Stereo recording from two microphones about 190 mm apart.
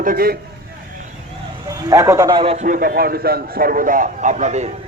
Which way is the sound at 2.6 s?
50° right (ahead or behind).